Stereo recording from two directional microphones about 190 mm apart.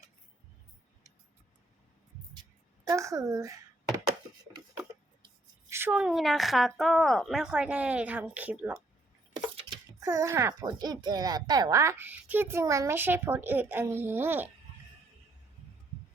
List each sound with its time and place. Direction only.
2.3 s music: 20° right (ahead or behind)
5.6 s a woman's voice: 15° right (ahead or behind)
9.3 s a child's voice: 20° right (ahead or behind)